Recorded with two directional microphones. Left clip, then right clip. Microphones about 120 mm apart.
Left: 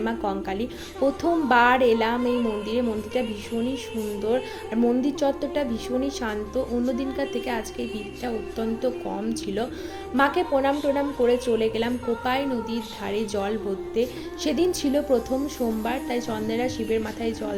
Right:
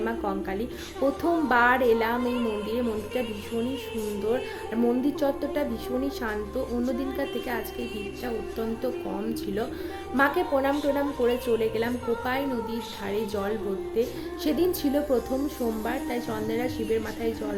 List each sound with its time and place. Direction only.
0.0 s a woman's voice: 15° left (ahead or behind)
0.9 s speech: 5° left (ahead or behind)
1.5 s a woman's voice: 15° left (ahead or behind)
2.1 s speech: centre (ahead or behind)
4.7 s a woman's voice: 15° left (ahead or behind)
11.9 s speech: centre (ahead or behind)
12.2 s a woman's voice: 15° left (ahead or behind)
15.3 s speech: centre (ahead or behind)
15.9 s a woman's voice: 25° left (ahead or behind)